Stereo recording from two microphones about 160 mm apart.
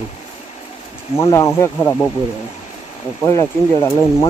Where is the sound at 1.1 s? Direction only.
20° left (ahead or behind).